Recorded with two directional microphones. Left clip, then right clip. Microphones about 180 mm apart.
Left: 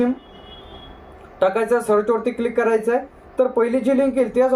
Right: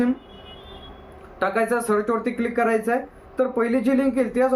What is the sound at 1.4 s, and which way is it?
Speech, 10° right (ahead or behind).